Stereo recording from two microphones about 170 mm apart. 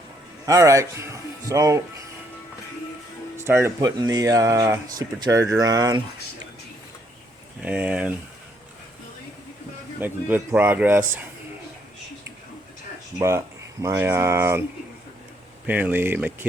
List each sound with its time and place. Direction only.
0.4 s speech: 20° right (ahead or behind)
3.4 s speech: 15° right (ahead or behind)
7.6 s speech: 5° right (ahead or behind)
10.0 s speech: 10° right (ahead or behind)
13.1 s speech: 15° right (ahead or behind)
15.6 s speech: 10° right (ahead or behind)